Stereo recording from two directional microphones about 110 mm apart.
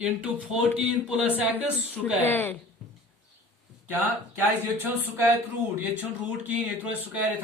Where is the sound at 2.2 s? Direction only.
20° left (ahead or behind).